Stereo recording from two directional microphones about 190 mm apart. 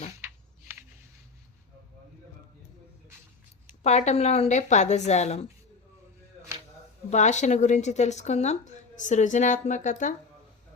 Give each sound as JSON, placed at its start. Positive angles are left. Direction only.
{"t": 3.8, "sound": "speech", "side_deg": 35}
{"t": 7.1, "sound": "speech", "side_deg": 40}